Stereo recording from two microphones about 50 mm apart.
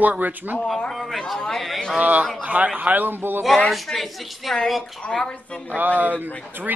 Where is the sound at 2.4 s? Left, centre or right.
Right.